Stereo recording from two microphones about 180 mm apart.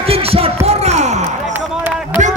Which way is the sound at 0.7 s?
35° right (ahead or behind).